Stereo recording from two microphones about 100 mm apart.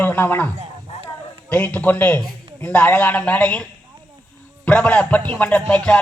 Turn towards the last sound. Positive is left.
turn(degrees=10)  # may be behind; listen again after turning